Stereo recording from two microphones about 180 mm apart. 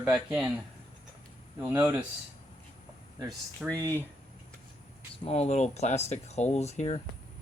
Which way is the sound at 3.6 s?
10° left (ahead or behind).